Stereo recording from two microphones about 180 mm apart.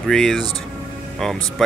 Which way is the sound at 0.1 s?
5° left (ahead or behind).